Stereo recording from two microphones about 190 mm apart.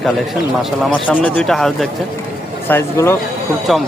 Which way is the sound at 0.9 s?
10° left (ahead or behind).